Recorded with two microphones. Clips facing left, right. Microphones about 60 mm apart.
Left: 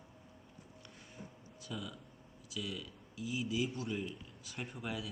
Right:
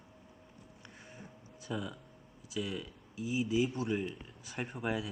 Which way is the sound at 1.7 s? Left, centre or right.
Right.